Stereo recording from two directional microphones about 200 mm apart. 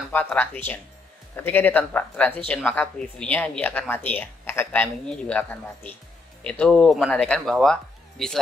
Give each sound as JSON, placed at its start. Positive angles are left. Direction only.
{"t": 0.1, "sound": "speech", "side_deg": 10}